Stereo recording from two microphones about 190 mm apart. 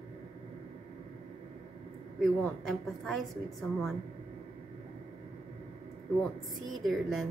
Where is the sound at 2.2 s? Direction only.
Centre (ahead or behind).